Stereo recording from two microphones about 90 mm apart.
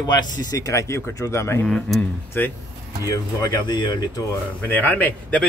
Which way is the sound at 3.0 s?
45° left (ahead or behind).